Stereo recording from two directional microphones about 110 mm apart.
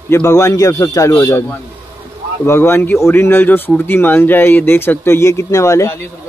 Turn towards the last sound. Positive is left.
turn(degrees=25)  # may be behind; listen again after turning